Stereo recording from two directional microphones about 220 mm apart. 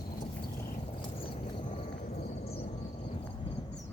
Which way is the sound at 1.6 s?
35° left (ahead or behind).